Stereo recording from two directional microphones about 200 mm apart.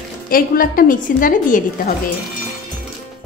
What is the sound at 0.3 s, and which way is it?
A woman's voice, 45° left (ahead or behind).